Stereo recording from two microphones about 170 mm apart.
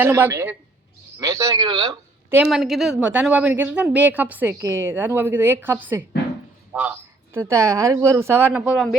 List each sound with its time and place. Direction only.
0.0 s speech: 10° right (ahead or behind)
2.3 s speech: 5° right (ahead or behind)